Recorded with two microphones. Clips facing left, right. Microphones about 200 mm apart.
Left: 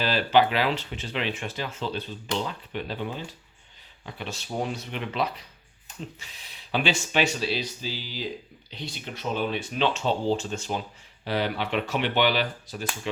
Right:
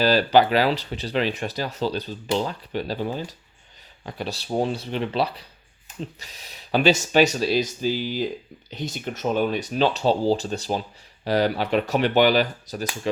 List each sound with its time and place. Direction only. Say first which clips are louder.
0.0 s speech: right 4 dB; 40° right (ahead or behind)